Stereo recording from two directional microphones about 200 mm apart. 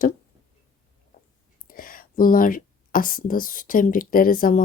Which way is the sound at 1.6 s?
45° left (ahead or behind).